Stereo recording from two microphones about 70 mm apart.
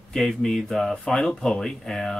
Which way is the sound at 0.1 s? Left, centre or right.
Centre.